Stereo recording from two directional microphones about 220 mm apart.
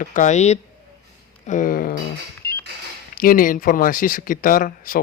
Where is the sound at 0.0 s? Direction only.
35° left (ahead or behind).